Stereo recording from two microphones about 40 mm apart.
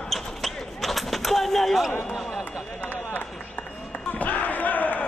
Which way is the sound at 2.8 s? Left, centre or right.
Left.